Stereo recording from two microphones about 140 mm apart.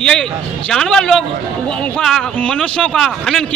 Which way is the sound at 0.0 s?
5° left (ahead or behind).